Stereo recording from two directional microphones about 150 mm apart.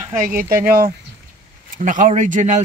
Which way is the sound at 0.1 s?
65° right (ahead or behind).